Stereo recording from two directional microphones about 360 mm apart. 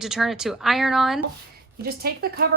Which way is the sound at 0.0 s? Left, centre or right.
Centre.